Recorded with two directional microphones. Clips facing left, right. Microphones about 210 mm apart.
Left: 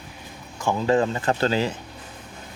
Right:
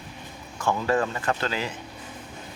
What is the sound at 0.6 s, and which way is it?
Speech, 15° left (ahead or behind).